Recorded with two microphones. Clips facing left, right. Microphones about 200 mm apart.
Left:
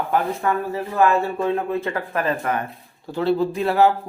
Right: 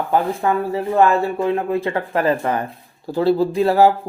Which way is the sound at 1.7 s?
30° right (ahead or behind).